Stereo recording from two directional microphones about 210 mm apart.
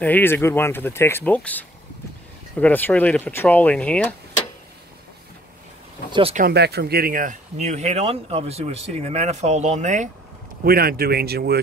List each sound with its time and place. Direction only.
0.0 s speech: 10° left (ahead or behind)
6.3 s speech: 50° right (ahead or behind)